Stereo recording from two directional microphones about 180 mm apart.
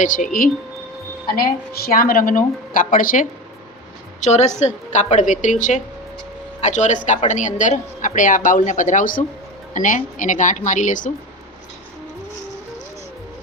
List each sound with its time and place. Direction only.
0.0 s a woman's voice: 45° left (ahead or behind)